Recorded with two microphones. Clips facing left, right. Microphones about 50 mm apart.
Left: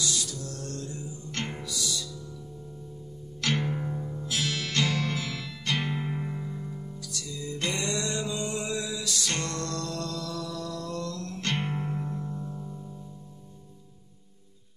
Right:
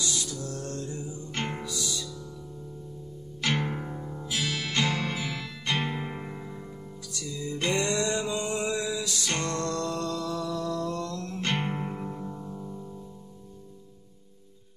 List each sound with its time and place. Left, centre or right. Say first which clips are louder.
0.0 s music: even; centre
3.3 s music: even; centre